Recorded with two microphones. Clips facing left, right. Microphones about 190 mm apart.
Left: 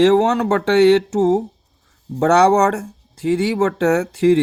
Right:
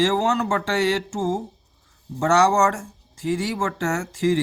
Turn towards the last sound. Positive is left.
turn(degrees=65)  # may be behind; listen again after turning